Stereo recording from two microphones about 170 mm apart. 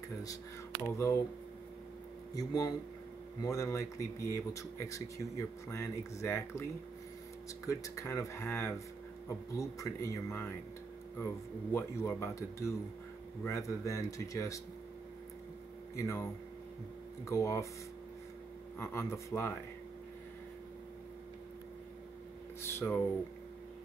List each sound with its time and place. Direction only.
0.8 s speech: 15° left (ahead or behind)
2.3 s speech: 20° left (ahead or behind)
7.6 s speech: 20° left (ahead or behind)
16.0 s speech: 15° left (ahead or behind)
18.8 s speech: 15° left (ahead or behind)
22.8 s speech: 15° left (ahead or behind)